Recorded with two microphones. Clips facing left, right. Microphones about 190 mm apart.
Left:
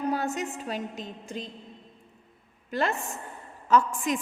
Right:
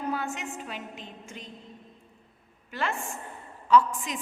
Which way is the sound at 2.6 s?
40° left (ahead or behind).